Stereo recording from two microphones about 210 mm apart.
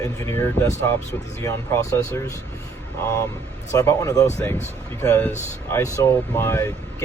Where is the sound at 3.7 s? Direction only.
15° left (ahead or behind).